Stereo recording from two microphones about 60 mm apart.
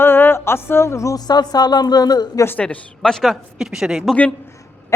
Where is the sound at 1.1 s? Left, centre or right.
Left.